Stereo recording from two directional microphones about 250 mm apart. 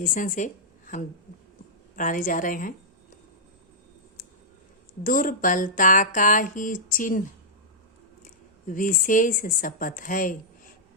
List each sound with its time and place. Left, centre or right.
0.0 s a woman's voice: left
5.0 s speech: left
8.2 s speech: left